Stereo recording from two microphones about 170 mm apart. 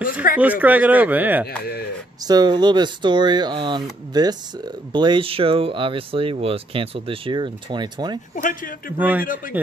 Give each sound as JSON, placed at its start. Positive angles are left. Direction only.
{"t": 0.0, "sound": "a sound", "side_deg": 55}
{"t": 0.4, "sound": "speech", "side_deg": -10}
{"t": 1.6, "sound": "speech", "side_deg": 65}
{"t": 2.2, "sound": "speech", "side_deg": -25}
{"t": 8.4, "sound": "a man's voice", "side_deg": 50}
{"t": 8.9, "sound": "speech", "side_deg": -10}